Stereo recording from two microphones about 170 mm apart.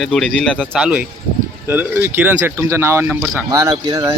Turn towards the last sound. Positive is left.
turn(degrees=-25)  # may be behind; listen again after turning